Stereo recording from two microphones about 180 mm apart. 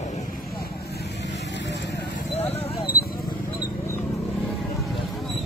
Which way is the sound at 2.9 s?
55° left (ahead or behind).